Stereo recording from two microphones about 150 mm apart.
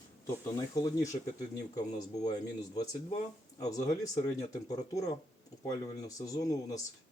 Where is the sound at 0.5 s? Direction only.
25° left (ahead or behind).